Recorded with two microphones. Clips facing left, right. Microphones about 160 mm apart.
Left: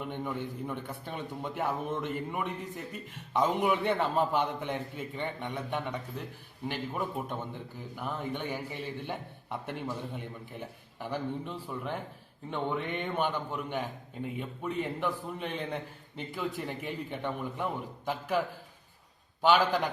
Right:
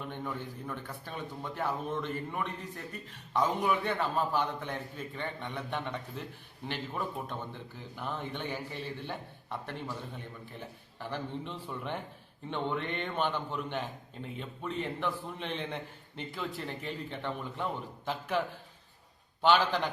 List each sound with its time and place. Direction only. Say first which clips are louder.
0.0 s speech: left 3 dB; 15° left (ahead or behind)